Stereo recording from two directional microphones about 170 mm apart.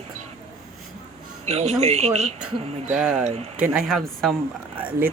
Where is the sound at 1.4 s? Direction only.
40° right (ahead or behind).